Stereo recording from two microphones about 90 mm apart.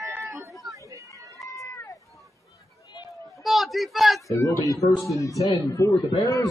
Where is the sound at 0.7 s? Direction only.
35° right (ahead or behind).